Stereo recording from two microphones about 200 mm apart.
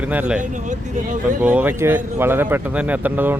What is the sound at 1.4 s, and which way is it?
Speech, 5° right (ahead or behind).